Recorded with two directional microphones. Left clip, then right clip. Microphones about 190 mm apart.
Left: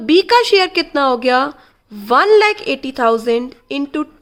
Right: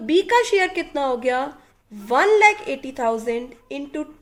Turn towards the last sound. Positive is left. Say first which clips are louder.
# left 8 dB
turn(degrees=50)  # may be behind; listen again after turning